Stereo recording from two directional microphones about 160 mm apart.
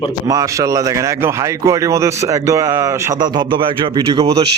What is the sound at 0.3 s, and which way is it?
A man's voice, 20° right (ahead or behind).